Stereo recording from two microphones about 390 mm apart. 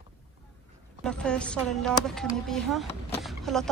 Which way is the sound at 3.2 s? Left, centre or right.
Centre.